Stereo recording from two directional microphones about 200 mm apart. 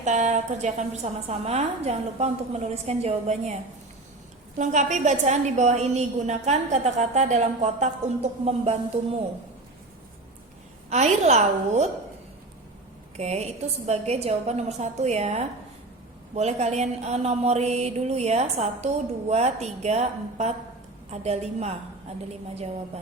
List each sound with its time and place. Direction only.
0.0 s a woman's voice: 35° right (ahead or behind)
10.8 s a woman's voice: 35° right (ahead or behind)
13.1 s a woman's voice: 35° right (ahead or behind)